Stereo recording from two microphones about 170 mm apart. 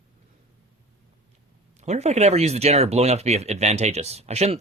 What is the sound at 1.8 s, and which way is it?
Speech, 40° right (ahead or behind).